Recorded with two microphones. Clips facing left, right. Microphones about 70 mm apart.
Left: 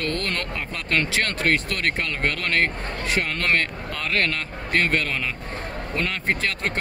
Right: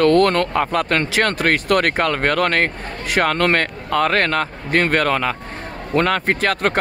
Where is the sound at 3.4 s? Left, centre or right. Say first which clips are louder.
Right 5 dB; right.